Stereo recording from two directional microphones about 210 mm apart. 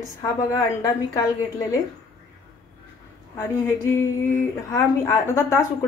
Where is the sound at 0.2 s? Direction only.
15° left (ahead or behind).